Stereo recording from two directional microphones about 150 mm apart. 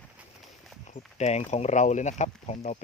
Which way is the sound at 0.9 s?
45° left (ahead or behind).